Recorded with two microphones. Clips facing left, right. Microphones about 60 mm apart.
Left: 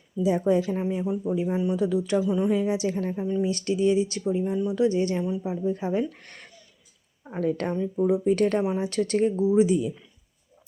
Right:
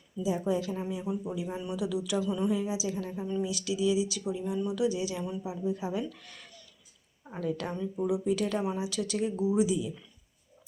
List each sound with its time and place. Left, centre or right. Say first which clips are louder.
0.2 s a woman's voice: left 7 dB; left
0.7 s speech: left 7 dB; left
1.0 s speech: left 7 dB; left
1.8 s speech: left 3 dB; left
2.5 s a woman's voice: left 6 dB; left
4.9 s speech: left 8 dB; left
7.8 s speech: left 7 dB; left
8.2 s speech: left 7 dB; left